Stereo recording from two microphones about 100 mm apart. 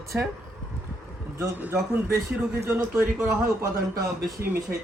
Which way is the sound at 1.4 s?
20° right (ahead or behind).